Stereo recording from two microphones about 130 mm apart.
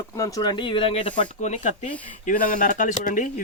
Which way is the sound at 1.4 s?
65° left (ahead or behind).